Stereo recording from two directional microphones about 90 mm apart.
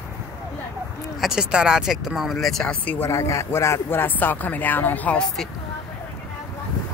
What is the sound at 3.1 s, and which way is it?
Speech, 30° left (ahead or behind).